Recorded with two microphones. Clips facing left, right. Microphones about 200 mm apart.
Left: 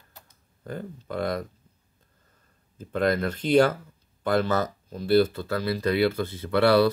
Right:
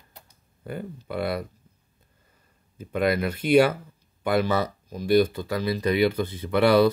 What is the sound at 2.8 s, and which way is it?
Speech, 10° right (ahead or behind).